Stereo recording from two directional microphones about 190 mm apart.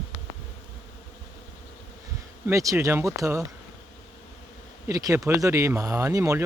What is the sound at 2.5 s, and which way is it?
Speech, 15° right (ahead or behind).